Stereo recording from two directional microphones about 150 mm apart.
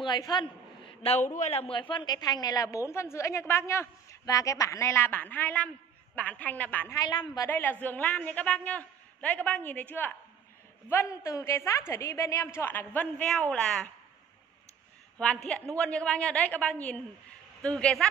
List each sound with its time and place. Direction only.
0.0 s a sound: 30° left (ahead or behind)
1.2 s a woman's voice: 55° left (ahead or behind); by 7.0 s 10° left (ahead or behind)
7.0 s a woman's voice: 25° left (ahead or behind)
7.4 s a man's voice: 15° left (ahead or behind)
15.1 s a man's voice: 5° left (ahead or behind)